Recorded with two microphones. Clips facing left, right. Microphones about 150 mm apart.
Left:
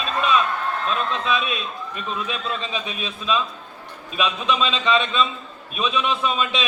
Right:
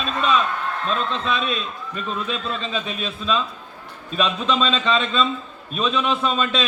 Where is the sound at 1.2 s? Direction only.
10° left (ahead or behind).